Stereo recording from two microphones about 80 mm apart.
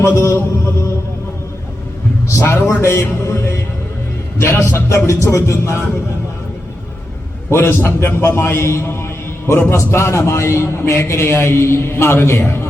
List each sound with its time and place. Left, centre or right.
0.0 s a man's voice: left
2.4 s a man's voice: left
7.5 s a man's voice: left